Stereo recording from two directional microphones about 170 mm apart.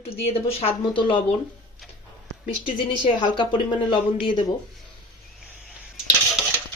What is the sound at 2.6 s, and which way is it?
Speech, 30° left (ahead or behind).